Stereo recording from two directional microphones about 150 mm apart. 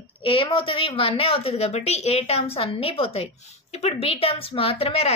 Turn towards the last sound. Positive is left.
turn(degrees=40)  # may be behind; listen again after turning